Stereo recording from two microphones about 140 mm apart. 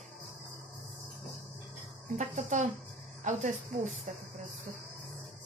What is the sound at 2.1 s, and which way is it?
Speech, 60° right (ahead or behind).